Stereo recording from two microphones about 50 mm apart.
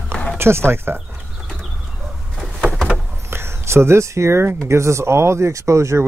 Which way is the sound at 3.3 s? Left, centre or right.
Right.